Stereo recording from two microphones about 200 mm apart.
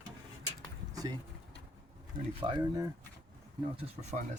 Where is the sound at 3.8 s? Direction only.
35° right (ahead or behind).